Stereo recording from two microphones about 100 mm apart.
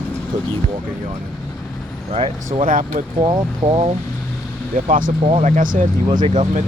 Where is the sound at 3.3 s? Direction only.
60° right (ahead or behind).